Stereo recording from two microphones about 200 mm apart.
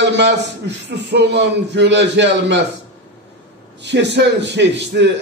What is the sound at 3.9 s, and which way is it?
A man's voice, 60° right (ahead or behind).